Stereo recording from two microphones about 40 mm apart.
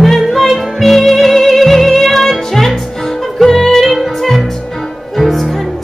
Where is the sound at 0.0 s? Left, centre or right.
Centre.